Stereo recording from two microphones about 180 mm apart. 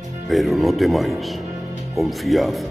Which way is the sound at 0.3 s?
Centre (ahead or behind).